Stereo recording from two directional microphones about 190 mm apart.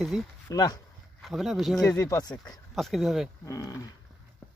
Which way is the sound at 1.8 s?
20° left (ahead or behind).